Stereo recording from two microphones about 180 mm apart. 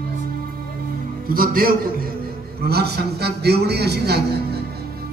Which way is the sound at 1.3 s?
55° right (ahead or behind).